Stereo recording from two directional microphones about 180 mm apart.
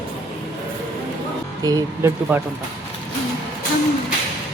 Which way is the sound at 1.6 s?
20° right (ahead or behind).